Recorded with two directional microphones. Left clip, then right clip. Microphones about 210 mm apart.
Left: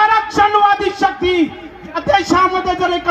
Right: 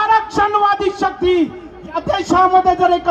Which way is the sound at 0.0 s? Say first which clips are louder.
Left 2 dB; 40° left (ahead or behind).